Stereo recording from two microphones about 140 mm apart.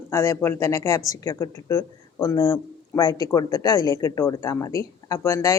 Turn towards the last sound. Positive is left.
turn(degrees=20)  # may be behind; listen again after turning